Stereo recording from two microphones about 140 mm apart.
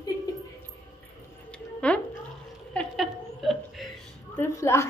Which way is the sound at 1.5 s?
10° left (ahead or behind).